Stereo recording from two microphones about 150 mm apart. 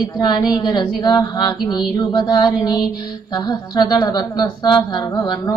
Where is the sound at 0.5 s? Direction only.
25° left (ahead or behind).